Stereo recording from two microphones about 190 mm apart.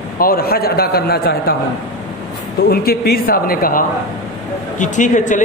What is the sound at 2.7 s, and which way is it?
A man's voice, 55° left (ahead or behind).